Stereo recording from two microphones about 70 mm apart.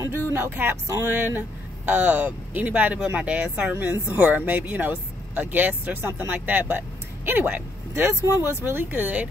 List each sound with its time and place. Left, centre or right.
0.1 s speech: right
0.9 s a sound: right
1.9 s speech: right